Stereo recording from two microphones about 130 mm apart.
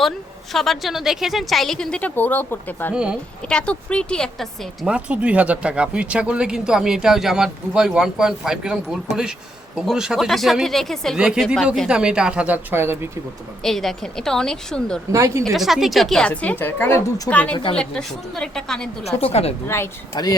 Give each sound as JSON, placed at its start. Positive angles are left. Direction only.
{"t": 0.5, "sound": "speech", "side_deg": 0}
{"t": 2.9, "sound": "speech", "side_deg": -5}
{"t": 3.5, "sound": "a woman's voice", "side_deg": 10}
{"t": 4.9, "sound": "speech", "side_deg": -10}
{"t": 13.6, "sound": "speech", "side_deg": 0}
{"t": 15.1, "sound": "speech", "side_deg": -25}
{"t": 15.5, "sound": "a woman's voice", "side_deg": 0}
{"t": 19.0, "sound": "a woman's voice", "side_deg": 50}
{"t": 19.6, "sound": "speech", "side_deg": 20}
{"t": 20.1, "sound": "speech", "side_deg": 30}